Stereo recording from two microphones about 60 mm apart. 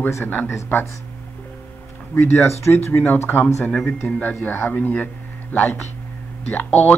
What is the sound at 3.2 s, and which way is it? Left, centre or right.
A man's voice, left.